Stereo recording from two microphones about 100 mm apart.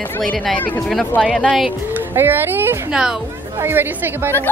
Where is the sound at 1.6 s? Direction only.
20° right (ahead or behind).